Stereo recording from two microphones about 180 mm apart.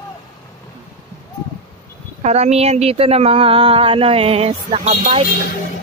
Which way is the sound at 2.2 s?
40° right (ahead or behind).